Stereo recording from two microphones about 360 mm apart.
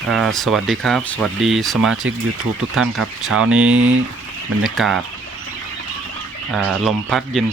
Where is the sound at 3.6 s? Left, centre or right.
Right.